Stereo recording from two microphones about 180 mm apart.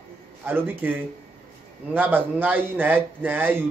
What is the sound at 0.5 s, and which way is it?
Speech, 10° right (ahead or behind).